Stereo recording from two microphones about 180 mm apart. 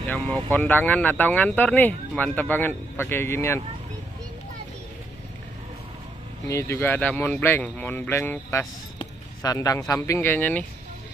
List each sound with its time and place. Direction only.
0.0 s speech: 10° left (ahead or behind)
6.4 s speech: 15° left (ahead or behind)